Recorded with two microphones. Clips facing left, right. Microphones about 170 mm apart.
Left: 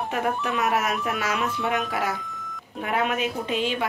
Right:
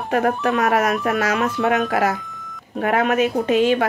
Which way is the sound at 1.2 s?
60° right (ahead or behind).